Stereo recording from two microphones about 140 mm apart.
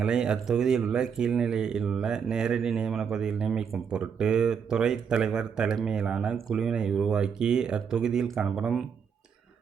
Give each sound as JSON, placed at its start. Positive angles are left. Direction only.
{"t": 0.0, "sound": "speech", "side_deg": -5}